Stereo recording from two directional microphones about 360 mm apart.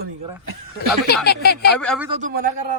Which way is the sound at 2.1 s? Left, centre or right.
Right.